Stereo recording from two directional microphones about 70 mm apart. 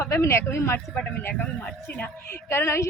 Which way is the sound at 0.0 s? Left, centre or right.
Left.